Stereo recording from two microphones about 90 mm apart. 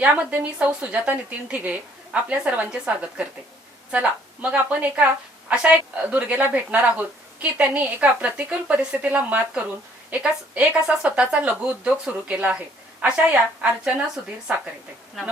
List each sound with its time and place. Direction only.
0.0 s a woman's voice: 15° right (ahead or behind)